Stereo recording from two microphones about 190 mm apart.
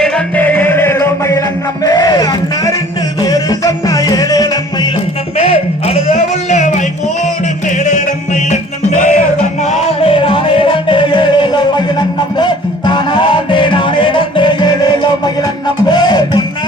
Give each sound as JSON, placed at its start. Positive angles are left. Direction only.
{"t": 0.0, "sound": "music", "side_deg": 5}
{"t": 5.4, "sound": "a sound", "side_deg": 35}
{"t": 7.9, "sound": "music", "side_deg": 40}